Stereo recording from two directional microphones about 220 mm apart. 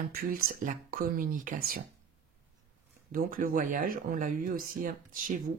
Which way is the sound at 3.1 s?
40° right (ahead or behind).